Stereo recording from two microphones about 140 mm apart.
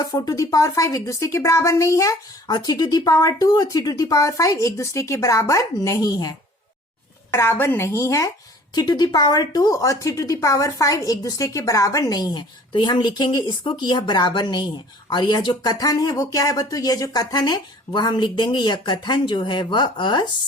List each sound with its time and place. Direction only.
0.0 s a woman's voice: 30° left (ahead or behind)
7.3 s a woman's voice: 15° left (ahead or behind); by 20.2 s 35° left (ahead or behind)